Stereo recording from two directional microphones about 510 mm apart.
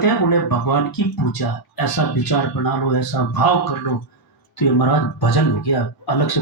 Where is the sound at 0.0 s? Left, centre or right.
Left.